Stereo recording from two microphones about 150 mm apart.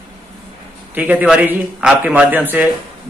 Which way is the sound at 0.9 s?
10° right (ahead or behind).